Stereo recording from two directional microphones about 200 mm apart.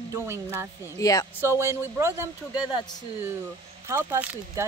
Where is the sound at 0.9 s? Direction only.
15° left (ahead or behind).